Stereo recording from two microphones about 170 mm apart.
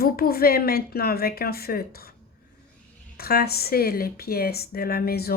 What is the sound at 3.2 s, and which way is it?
A woman's voice, 65° left (ahead or behind).